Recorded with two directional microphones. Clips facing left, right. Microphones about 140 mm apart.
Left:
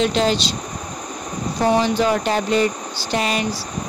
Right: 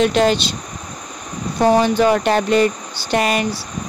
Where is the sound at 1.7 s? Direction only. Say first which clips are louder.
Right 4 dB; 55° right (ahead or behind).